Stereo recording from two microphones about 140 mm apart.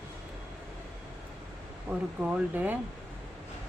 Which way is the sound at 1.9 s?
10° right (ahead or behind).